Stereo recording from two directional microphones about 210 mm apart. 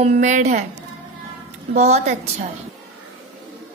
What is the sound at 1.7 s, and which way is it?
Speech, 30° right (ahead or behind).